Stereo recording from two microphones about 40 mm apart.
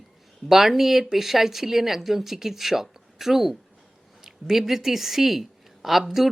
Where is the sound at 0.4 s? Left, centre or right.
Centre.